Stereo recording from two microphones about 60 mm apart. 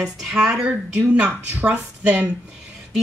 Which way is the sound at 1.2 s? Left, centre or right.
Right.